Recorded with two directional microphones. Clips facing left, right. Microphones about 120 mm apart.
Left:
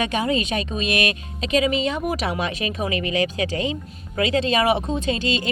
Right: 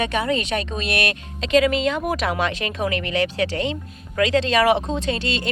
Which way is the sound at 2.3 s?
90° right.